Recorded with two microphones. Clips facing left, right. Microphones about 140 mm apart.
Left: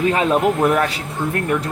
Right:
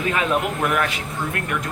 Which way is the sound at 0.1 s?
35° left (ahead or behind).